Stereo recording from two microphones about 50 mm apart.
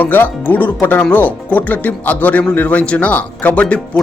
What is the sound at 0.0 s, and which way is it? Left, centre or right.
A man's voice, left.